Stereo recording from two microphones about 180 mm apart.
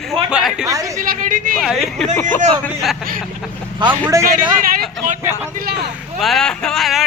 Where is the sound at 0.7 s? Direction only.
20° right (ahead or behind).